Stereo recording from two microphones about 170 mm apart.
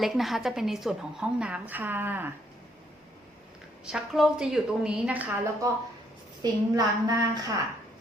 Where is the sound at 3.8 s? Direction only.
5° right (ahead or behind).